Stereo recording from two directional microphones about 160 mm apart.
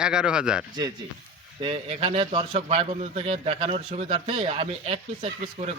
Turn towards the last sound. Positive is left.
turn(degrees=-40)  # may be behind; listen again after turning